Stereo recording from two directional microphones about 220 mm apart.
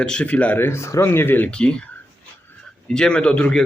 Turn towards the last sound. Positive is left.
turn(degrees=5)  # may be behind; listen again after turning